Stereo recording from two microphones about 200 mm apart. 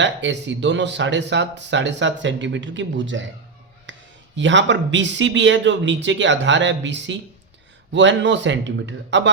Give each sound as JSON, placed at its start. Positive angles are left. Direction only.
{"t": 0.0, "sound": "speech", "side_deg": -65}
{"t": 3.9, "sound": "a sound", "side_deg": -70}
{"t": 4.4, "sound": "speech", "side_deg": -65}